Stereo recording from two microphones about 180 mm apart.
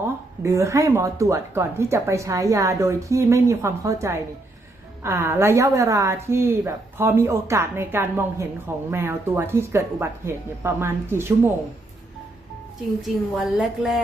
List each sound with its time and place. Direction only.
0.4 s speech: 15° right (ahead or behind)
13.0 s a woman's voice: centre (ahead or behind)